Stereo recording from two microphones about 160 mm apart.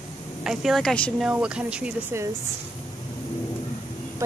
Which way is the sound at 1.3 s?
5° right (ahead or behind).